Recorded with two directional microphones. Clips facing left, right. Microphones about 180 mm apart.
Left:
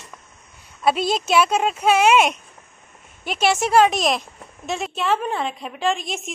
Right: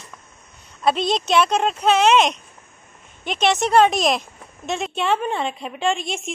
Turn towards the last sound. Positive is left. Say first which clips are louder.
# right 1 dB
turn(degrees=0)  # may be behind; listen again after turning